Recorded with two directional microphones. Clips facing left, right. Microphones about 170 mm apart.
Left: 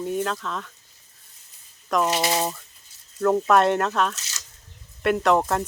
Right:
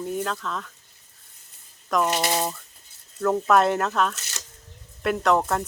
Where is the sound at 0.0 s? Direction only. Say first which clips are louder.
Left 2 dB; centre (ahead or behind).